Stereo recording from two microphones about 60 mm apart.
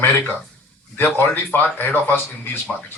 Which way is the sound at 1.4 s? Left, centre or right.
Left.